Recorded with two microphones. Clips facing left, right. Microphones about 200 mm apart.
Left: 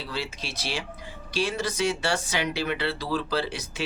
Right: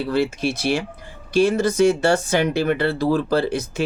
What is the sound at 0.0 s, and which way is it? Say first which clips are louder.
Speech: right 13 dB; 55° right (ahead or behind).